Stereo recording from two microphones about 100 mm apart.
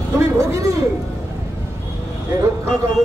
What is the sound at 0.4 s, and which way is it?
Speech, 30° right (ahead or behind).